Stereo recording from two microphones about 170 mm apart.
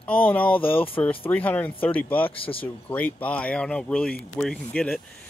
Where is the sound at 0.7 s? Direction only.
30° left (ahead or behind).